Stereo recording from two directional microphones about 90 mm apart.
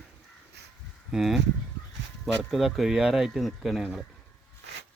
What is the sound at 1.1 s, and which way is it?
Speech, 5° right (ahead or behind).